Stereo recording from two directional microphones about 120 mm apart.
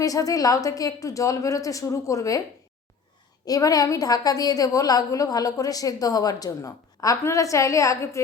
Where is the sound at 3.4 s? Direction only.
30° left (ahead or behind).